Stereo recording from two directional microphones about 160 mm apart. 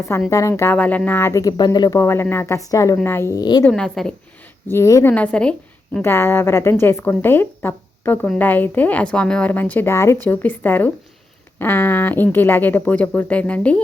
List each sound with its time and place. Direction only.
0.3 s a woman's voice: 20° left (ahead or behind)
3.6 s speech: 5° left (ahead or behind)
4.7 s a woman's voice: 20° left (ahead or behind)
5.1 s a woman's voice: 5° left (ahead or behind)